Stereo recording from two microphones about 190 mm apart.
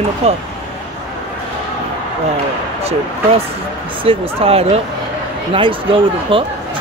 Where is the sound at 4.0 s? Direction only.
30° right (ahead or behind).